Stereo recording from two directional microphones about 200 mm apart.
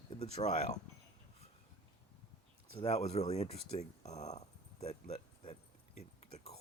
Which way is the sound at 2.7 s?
30° left (ahead or behind).